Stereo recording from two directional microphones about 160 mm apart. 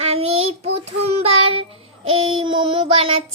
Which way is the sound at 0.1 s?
40° right (ahead or behind).